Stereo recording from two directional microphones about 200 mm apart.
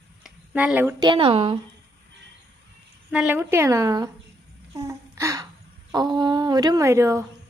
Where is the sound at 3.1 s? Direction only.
5° right (ahead or behind).